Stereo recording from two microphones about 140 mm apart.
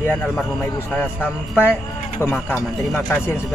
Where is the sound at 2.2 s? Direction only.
15° left (ahead or behind).